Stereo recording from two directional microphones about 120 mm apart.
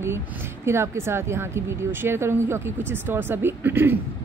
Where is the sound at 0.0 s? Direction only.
20° right (ahead or behind).